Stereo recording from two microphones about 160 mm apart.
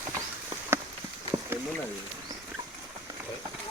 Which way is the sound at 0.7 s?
15° right (ahead or behind).